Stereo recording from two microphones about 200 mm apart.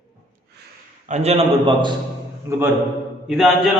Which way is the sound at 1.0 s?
35° right (ahead or behind).